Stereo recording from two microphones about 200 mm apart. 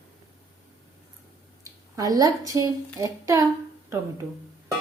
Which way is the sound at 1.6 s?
15° right (ahead or behind).